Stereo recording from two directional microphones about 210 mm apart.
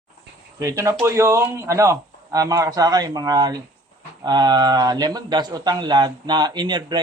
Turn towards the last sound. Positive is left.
turn(degrees=-20)  # may be behind; listen again after turning